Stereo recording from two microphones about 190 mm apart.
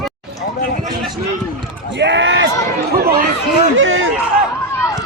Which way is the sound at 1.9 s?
70° right (ahead or behind).